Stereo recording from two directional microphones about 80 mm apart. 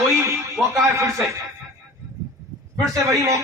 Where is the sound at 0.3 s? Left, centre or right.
Right.